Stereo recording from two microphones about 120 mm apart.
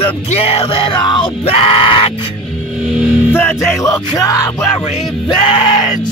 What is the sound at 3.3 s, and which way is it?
Music, 20° left (ahead or behind).